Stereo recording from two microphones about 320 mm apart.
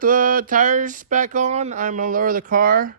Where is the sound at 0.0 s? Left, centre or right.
Right.